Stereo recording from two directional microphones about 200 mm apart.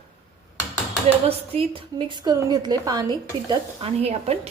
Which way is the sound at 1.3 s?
30° right (ahead or behind).